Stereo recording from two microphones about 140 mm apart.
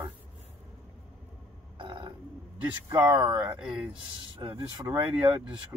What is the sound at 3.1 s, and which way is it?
Speech, 30° right (ahead or behind).